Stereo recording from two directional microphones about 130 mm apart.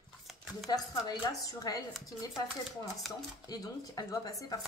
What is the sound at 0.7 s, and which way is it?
A woman's voice, 30° left (ahead or behind).